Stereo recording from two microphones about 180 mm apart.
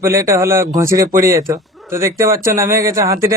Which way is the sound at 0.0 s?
15° right (ahead or behind).